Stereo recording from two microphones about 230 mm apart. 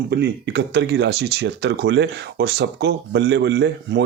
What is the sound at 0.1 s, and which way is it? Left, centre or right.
Speech, right.